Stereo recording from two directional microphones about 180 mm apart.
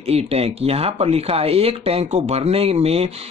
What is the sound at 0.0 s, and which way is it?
Speech, 35° right (ahead or behind).